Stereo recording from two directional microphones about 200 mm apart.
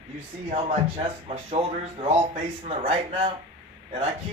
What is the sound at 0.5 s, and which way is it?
A man's voice, 30° right (ahead or behind).